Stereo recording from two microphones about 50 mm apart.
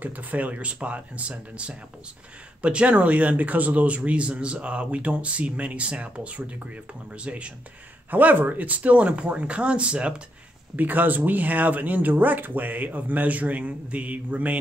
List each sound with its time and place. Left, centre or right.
0.0 s speech: right
8.1 s speech: right
10.8 s speech: right